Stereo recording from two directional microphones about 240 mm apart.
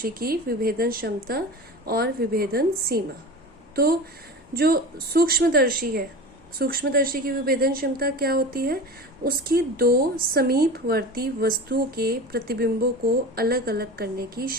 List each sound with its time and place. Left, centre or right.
0.0 s speech: right
4.5 s speech: right